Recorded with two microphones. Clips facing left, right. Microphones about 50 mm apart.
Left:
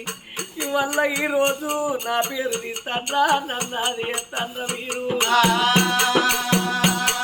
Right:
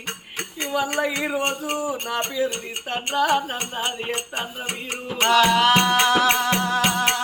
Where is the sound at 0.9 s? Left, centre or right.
Left.